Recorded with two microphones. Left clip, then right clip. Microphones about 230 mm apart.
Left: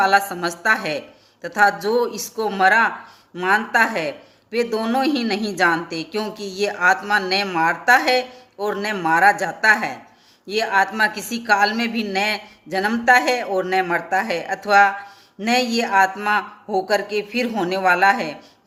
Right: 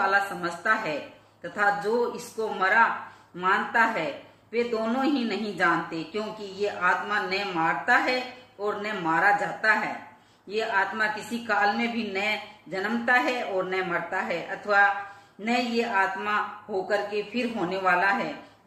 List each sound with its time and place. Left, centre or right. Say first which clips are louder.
0.0 s a woman's voice: left 7 dB; left